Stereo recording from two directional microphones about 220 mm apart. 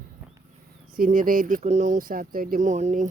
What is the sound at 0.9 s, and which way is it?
Speech, 40° right (ahead or behind).